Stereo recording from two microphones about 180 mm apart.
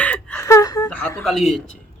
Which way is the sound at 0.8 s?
10° left (ahead or behind).